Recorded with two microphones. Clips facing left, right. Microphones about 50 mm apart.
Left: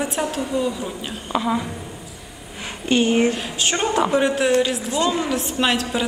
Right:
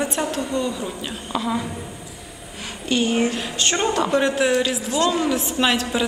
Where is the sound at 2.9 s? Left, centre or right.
Left.